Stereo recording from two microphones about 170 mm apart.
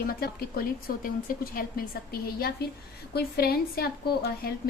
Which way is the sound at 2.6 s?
70° left (ahead or behind).